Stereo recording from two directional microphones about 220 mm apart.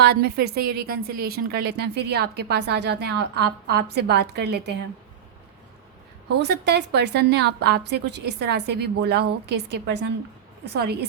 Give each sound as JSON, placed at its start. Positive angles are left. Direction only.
{"t": 0.0, "sound": "a woman's voice", "side_deg": -50}
{"t": 6.4, "sound": "a woman's voice", "side_deg": -50}